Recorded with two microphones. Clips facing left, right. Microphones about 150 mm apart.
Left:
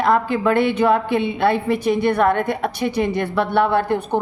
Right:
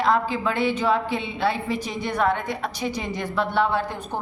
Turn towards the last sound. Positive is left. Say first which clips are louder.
# left 7 dB
turn(degrees=65)  # may be behind; listen again after turning